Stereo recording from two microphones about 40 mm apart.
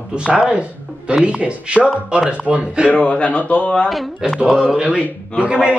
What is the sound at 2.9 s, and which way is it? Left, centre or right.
Speech, left.